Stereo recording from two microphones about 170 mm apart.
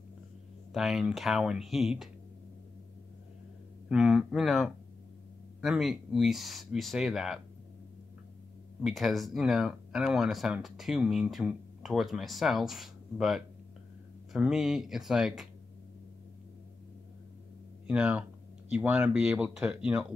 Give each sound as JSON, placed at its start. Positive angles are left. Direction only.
{"t": 0.7, "sound": "speech", "side_deg": 0}
{"t": 3.9, "sound": "speech", "side_deg": -5}
{"t": 8.8, "sound": "speech", "side_deg": 0}
{"t": 17.8, "sound": "speech", "side_deg": -5}